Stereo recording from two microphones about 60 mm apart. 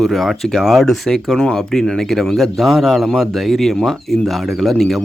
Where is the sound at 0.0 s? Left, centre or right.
Centre.